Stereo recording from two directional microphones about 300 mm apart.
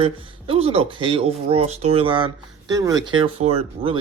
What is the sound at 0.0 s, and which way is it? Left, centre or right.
A man's voice, centre.